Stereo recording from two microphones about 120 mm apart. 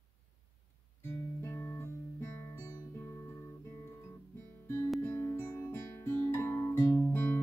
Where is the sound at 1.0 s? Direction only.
20° left (ahead or behind).